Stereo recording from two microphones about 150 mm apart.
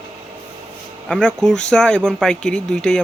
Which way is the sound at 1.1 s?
5° left (ahead or behind).